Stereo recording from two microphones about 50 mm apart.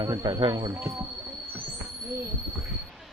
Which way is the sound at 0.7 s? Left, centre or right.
Right.